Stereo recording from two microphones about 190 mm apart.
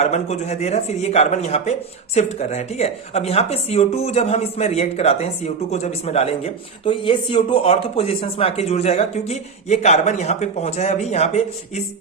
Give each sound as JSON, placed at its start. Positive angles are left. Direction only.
{"t": 0.0, "sound": "a man's voice", "side_deg": 40}